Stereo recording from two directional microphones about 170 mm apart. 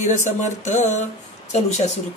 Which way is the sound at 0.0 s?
45° left (ahead or behind).